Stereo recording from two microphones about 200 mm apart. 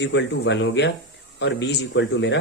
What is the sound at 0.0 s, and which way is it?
Speech, 65° left (ahead or behind).